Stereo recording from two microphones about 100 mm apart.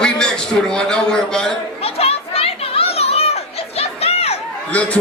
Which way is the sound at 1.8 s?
85° left.